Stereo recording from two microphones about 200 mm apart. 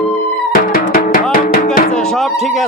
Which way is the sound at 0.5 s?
45° left (ahead or behind).